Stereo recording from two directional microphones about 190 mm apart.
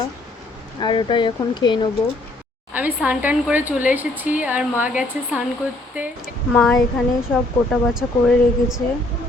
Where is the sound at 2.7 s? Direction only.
10° right (ahead or behind).